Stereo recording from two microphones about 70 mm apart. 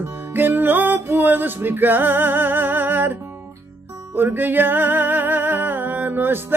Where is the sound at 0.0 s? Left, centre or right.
Right.